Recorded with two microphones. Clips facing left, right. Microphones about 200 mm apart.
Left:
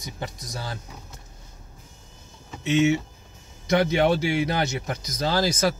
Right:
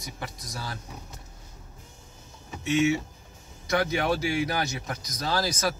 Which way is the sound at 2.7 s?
20° left (ahead or behind).